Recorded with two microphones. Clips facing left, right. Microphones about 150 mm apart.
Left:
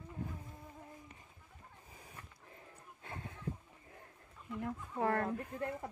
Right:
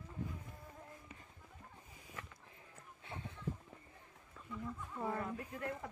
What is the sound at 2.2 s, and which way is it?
Walk, 90° right.